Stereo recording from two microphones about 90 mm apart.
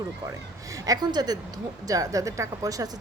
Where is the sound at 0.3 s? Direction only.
40° right (ahead or behind).